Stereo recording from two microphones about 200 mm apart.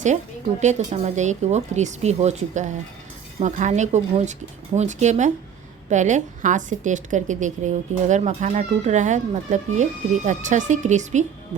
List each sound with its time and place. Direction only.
0.6 s a woman's voice: 35° right (ahead or behind)